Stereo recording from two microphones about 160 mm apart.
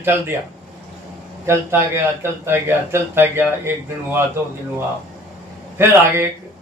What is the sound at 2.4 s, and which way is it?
Speech, 15° right (ahead or behind).